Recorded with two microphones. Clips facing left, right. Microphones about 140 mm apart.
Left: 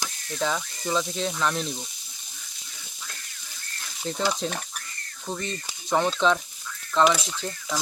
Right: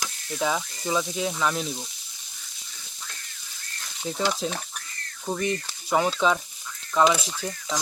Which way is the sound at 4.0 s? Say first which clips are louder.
Even; centre (ahead or behind).